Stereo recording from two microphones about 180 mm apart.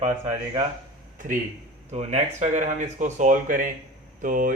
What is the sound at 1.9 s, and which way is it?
Speech, 40° right (ahead or behind).